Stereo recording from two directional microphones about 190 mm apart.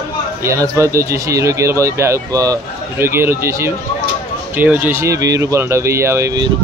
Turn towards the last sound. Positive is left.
turn(degrees=-20)  # may be behind; listen again after turning